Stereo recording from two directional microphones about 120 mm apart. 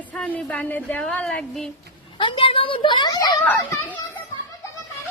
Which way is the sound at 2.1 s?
45° left (ahead or behind).